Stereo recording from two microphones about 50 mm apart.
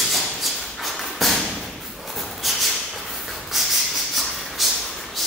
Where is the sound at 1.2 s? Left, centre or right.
Centre.